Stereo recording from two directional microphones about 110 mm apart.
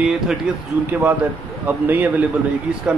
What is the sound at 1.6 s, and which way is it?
Speech, 15° right (ahead or behind).